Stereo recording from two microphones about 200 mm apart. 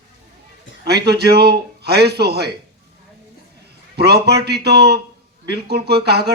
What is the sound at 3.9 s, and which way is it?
A man's voice, 55° right (ahead or behind).